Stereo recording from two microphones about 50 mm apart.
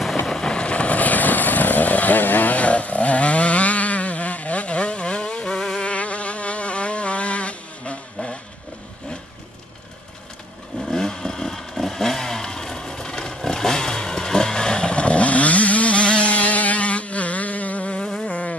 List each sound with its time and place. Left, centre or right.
0.3 s vehicle: centre
5.9 s insect: left
10.8 s vehicle: centre
18.2 s a sound: left